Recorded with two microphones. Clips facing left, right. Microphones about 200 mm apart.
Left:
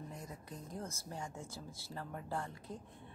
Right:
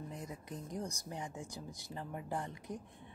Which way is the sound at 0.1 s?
20° right (ahead or behind).